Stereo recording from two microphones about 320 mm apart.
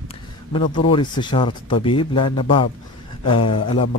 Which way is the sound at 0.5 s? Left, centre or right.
Centre.